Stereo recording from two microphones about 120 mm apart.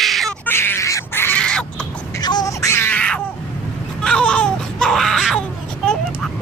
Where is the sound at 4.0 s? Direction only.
5° left (ahead or behind).